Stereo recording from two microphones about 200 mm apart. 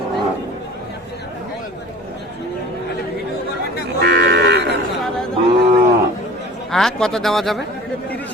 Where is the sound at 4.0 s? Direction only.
55° right (ahead or behind).